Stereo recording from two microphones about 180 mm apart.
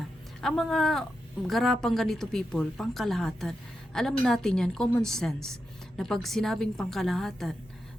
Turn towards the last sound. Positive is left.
turn(degrees=0)  # may be behind; listen again after turning